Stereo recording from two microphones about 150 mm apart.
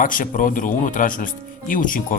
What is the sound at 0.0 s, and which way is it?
Speech, 65° left (ahead or behind).